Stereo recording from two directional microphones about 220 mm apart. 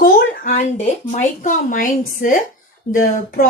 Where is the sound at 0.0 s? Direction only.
40° left (ahead or behind).